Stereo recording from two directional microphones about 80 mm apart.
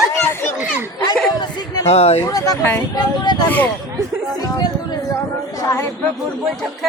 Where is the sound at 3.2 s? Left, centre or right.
Left.